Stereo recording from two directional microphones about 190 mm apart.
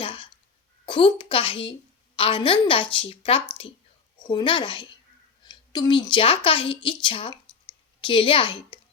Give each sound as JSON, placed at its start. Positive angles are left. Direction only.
{"t": 0.0, "sound": "cough", "side_deg": 25}
{"t": 0.9, "sound": "a woman's voice", "side_deg": 25}